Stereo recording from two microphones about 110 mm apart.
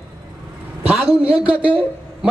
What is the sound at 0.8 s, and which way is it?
Speech, 10° right (ahead or behind).